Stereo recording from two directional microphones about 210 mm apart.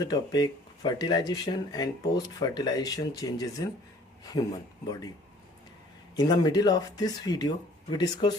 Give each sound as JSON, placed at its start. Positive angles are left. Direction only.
{"t": 0.0, "sound": "speech", "side_deg": 20}
{"t": 6.1, "sound": "speech", "side_deg": 20}